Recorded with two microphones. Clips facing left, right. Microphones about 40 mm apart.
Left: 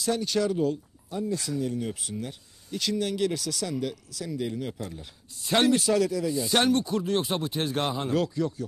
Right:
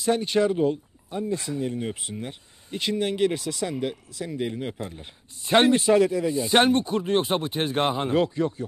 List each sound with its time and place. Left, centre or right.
0.0 s speech: right